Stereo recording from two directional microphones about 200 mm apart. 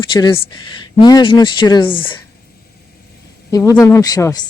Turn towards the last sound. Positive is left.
turn(degrees=15)  # may be behind; listen again after turning